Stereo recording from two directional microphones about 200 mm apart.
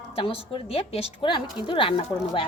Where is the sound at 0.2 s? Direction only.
30° left (ahead or behind).